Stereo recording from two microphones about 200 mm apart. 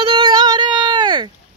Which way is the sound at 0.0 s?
25° right (ahead or behind).